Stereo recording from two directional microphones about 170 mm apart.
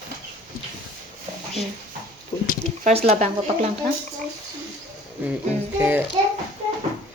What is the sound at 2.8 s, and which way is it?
Speech, 40° right (ahead or behind).